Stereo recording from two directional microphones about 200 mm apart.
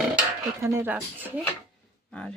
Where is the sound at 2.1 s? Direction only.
5° left (ahead or behind).